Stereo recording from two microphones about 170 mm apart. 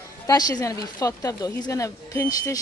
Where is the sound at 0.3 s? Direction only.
20° left (ahead or behind).